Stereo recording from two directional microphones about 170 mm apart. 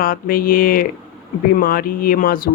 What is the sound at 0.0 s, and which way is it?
Speech, 55° left (ahead or behind).